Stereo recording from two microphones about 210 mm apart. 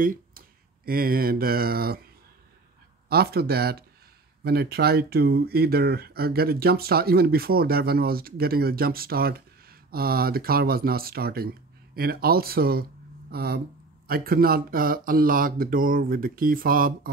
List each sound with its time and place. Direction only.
0.0 s a sound: 40° right (ahead or behind)
0.8 s speech: 45° right (ahead or behind)
3.1 s speech: 50° right (ahead or behind)